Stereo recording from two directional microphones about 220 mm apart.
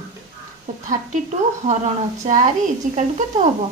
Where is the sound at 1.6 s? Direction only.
35° right (ahead or behind).